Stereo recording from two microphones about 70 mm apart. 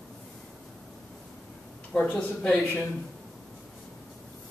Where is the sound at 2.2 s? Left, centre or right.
Centre.